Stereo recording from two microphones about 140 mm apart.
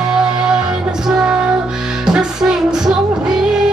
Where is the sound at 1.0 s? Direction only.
5° right (ahead or behind).